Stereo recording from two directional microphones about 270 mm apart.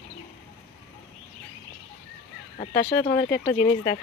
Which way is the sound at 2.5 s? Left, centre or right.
Left.